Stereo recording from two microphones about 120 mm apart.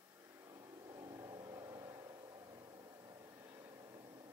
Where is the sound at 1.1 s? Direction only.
30° right (ahead or behind).